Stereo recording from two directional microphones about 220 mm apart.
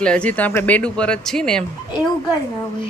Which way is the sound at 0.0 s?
5° left (ahead or behind).